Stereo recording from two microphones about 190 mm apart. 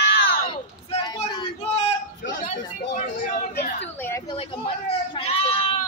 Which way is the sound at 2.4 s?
40° left (ahead or behind).